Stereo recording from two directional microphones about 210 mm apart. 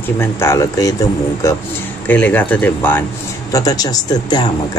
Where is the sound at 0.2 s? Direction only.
15° left (ahead or behind).